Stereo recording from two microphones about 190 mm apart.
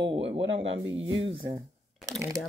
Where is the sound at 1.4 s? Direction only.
20° right (ahead or behind).